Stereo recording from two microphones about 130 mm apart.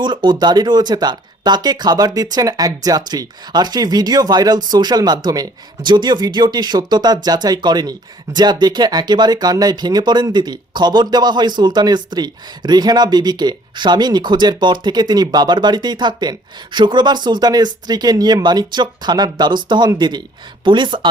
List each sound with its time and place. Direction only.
0.0 s speech: 35° right (ahead or behind)